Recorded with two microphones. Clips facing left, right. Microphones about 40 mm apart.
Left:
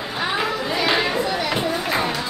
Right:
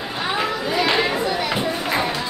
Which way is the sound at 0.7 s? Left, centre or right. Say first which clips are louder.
Right 1 dB; centre.